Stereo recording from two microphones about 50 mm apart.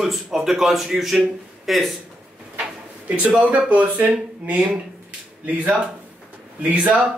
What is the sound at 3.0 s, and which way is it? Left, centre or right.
Speech, right.